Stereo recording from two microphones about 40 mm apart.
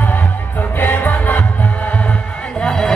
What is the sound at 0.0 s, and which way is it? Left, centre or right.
Music, left.